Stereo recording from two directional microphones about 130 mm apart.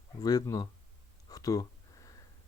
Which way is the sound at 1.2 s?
30° left (ahead or behind).